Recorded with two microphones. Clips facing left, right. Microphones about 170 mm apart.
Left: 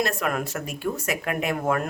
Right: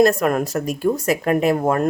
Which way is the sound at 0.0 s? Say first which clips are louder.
Right 10 dB; 40° right (ahead or behind).